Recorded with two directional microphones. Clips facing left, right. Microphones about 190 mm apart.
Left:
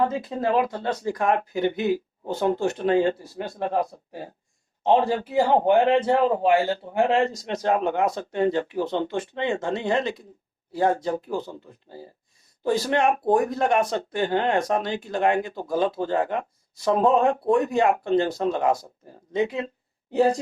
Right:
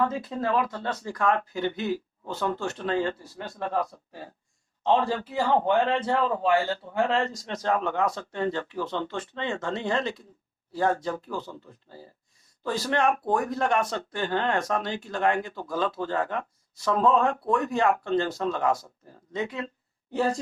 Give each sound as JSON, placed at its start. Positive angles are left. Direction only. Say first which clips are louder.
{"t": 0.0, "sound": "a man's voice", "louder": "left 3 dB", "side_deg": 20}